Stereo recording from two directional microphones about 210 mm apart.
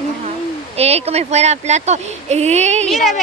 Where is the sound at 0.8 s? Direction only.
30° right (ahead or behind).